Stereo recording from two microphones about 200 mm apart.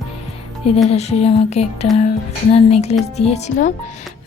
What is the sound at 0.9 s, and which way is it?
A woman's voice, 30° left (ahead or behind).